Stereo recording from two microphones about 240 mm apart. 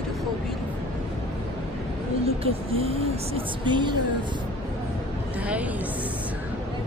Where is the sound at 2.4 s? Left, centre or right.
Right.